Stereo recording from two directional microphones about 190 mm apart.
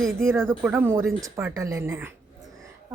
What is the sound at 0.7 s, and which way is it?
A woman's voice, 15° right (ahead or behind).